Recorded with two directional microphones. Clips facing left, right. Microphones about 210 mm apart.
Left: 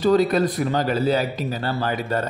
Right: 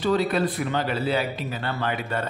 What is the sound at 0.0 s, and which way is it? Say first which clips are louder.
A man's voice: left 5 dB; 40° left (ahead or behind).